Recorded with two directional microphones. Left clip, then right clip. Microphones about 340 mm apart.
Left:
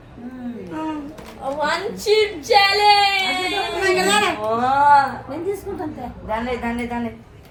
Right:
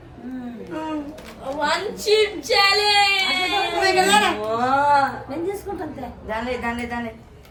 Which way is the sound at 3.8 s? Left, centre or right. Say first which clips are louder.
Right 1 dB; centre.